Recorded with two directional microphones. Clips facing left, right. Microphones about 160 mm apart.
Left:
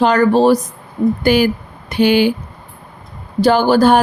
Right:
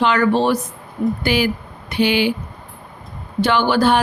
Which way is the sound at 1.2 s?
45° left (ahead or behind).